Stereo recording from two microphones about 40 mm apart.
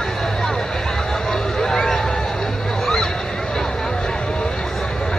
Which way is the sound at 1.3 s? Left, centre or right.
Centre.